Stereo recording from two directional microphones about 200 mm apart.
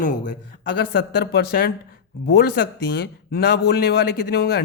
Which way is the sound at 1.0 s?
55° left (ahead or behind).